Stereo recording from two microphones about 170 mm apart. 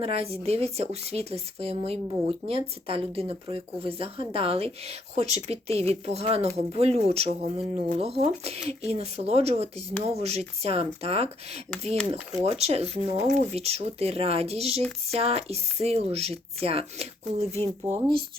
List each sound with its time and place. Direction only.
0.0 s speech: 35° right (ahead or behind)